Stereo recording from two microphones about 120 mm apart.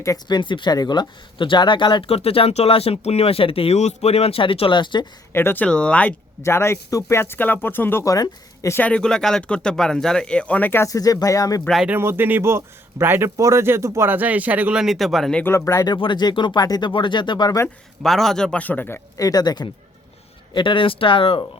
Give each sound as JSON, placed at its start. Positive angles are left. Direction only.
{"t": 0.0, "sound": "speech", "side_deg": 25}
{"t": 0.3, "sound": "speech", "side_deg": 40}
{"t": 5.3, "sound": "speech", "side_deg": 20}
{"t": 6.4, "sound": "speech", "side_deg": 20}
{"t": 8.0, "sound": "a woman's voice", "side_deg": 30}
{"t": 8.8, "sound": "speech", "side_deg": 10}
{"t": 10.8, "sound": "speech", "side_deg": 30}
{"t": 11.9, "sound": "speech", "side_deg": -20}
{"t": 15.4, "sound": "speech", "side_deg": 25}
{"t": 16.0, "sound": "speech", "side_deg": 40}
{"t": 18.0, "sound": "speech", "side_deg": 0}
{"t": 19.1, "sound": "speech", "side_deg": 30}